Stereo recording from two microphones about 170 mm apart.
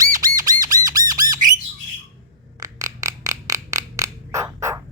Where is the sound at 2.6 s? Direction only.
20° right (ahead or behind).